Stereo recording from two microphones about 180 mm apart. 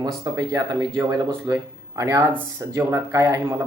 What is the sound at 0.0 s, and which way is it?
Speech, 20° right (ahead or behind).